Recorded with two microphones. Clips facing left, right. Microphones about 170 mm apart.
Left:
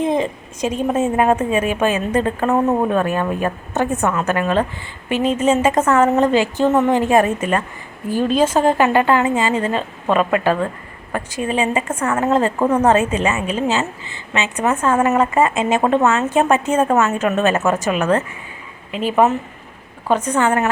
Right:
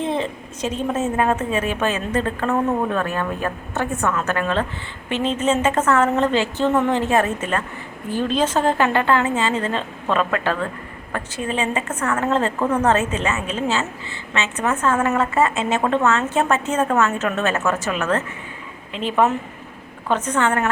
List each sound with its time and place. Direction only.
0.0 s a woman's voice: 15° left (ahead or behind)